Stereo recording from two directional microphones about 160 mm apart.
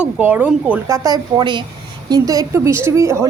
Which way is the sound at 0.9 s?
20° right (ahead or behind).